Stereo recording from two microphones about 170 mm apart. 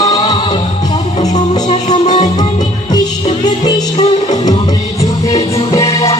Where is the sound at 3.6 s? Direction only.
20° left (ahead or behind).